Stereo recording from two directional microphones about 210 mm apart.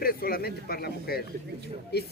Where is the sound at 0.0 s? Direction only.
45° left (ahead or behind).